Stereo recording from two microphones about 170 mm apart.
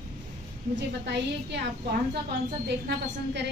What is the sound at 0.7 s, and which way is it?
Speech, 90° right.